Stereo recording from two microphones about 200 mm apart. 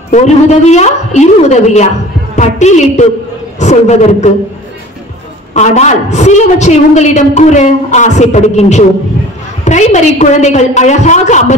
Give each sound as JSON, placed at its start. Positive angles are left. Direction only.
{"t": 0.1, "sound": "a woman's voice", "side_deg": 35}
{"t": 5.5, "sound": "a woman's voice", "side_deg": 35}